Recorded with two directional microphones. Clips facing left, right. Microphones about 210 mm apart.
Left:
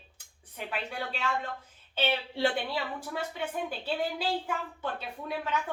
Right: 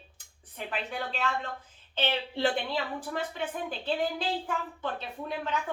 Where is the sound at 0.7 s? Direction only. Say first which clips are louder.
Right 1 dB; 10° left (ahead or behind).